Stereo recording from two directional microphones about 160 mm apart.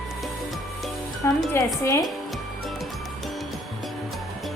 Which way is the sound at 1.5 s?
20° left (ahead or behind).